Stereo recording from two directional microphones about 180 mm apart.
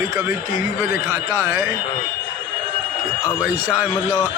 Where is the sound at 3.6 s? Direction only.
10° right (ahead or behind).